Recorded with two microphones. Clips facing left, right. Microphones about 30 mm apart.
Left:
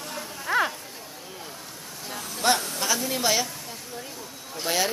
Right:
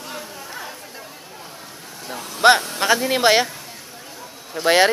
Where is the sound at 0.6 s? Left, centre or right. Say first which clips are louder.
Left 11 dB; left.